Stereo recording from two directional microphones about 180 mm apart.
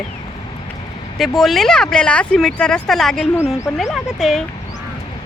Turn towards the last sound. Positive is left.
turn(degrees=0)  # may be behind; listen again after turning